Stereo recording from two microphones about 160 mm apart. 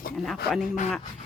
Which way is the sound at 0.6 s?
50° left (ahead or behind).